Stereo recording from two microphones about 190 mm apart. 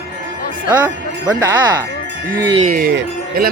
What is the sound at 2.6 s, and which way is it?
Speech, 55° right (ahead or behind).